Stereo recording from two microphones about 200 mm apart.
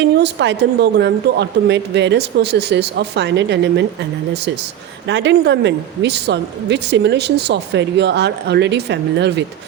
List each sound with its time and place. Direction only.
0.0 s a woman's voice: 60° right (ahead or behind)
5.0 s a woman's voice: 60° right (ahead or behind)